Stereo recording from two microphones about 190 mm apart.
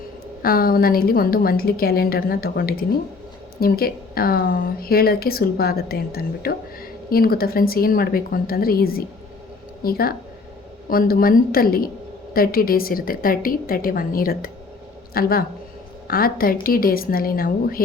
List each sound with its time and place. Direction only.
0.4 s speech: 50° left (ahead or behind)